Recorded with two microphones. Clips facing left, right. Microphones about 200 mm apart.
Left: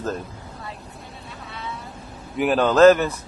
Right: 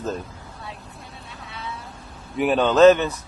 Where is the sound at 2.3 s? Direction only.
Centre (ahead or behind).